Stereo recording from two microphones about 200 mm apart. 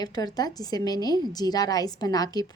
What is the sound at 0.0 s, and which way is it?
A woman's voice, 20° left (ahead or behind).